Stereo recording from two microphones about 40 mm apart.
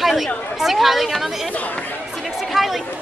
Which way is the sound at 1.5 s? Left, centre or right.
Left.